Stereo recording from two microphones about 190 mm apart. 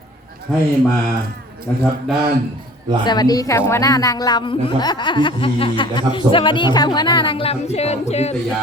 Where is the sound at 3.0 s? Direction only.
20° left (ahead or behind).